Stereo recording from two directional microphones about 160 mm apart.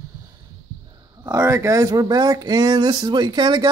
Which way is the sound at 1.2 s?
25° right (ahead or behind).